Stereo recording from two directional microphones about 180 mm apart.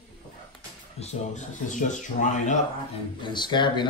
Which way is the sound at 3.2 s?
25° left (ahead or behind).